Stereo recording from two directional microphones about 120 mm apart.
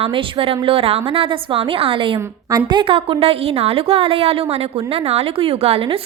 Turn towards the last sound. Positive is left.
turn(degrees=-55)  # may be behind; listen again after turning